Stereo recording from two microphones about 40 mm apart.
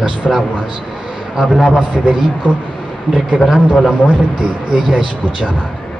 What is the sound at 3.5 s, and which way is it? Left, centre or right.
A man's voice, centre.